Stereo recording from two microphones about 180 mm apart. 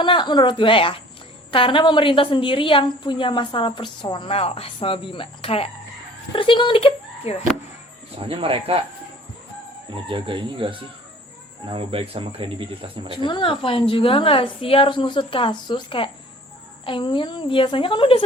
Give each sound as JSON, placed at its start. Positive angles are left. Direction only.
{"t": 0.0, "sound": "a woman's voice", "side_deg": 25}
{"t": 8.2, "sound": "speech", "side_deg": -30}
{"t": 10.1, "sound": "speech", "side_deg": -30}
{"t": 13.2, "sound": "a woman's voice", "side_deg": 30}